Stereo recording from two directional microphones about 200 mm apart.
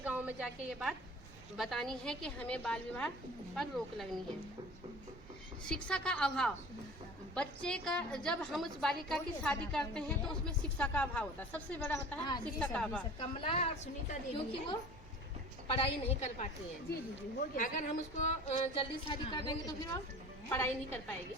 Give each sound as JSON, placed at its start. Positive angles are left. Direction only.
{"t": 0.0, "sound": "a woman's voice", "side_deg": -5}
{"t": 5.6, "sound": "a woman's voice", "side_deg": 5}
{"t": 13.4, "sound": "speech", "side_deg": 30}
{"t": 17.6, "sound": "a woman's voice", "side_deg": 35}